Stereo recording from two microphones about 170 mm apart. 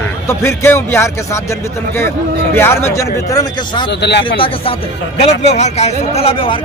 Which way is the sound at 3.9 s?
85° left.